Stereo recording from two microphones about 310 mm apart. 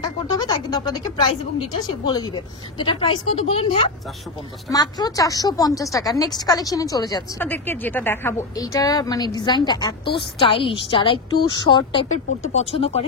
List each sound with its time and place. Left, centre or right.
0.0 s a woman's voice: centre